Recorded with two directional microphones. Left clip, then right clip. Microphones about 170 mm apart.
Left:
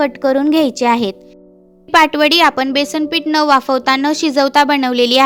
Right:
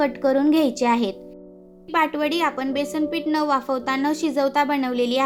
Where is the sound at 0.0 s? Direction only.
50° left (ahead or behind).